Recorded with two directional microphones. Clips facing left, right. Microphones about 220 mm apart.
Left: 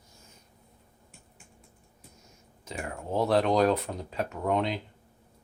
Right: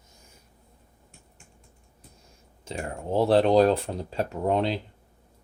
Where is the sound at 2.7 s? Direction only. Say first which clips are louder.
Right 4 dB; 30° right (ahead or behind).